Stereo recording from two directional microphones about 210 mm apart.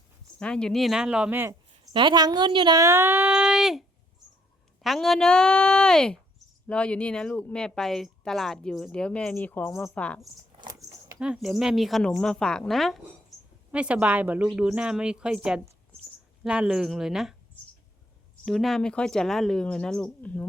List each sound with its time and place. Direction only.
0.3 s speech: 5° left (ahead or behind); by 1.9 s 10° right (ahead or behind)
1.9 s a woman's voice: 20° right (ahead or behind); by 10.2 s 5° left (ahead or behind)
10.6 s a sound: 15° right (ahead or behind)
11.2 s speech: 5° right (ahead or behind)